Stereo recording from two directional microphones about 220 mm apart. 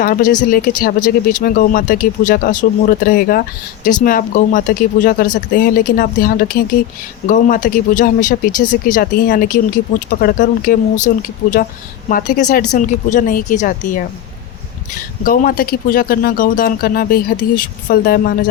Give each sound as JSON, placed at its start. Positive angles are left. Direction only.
{"t": 0.0, "sound": "speech", "side_deg": 40}
{"t": 15.2, "sound": "speech", "side_deg": 40}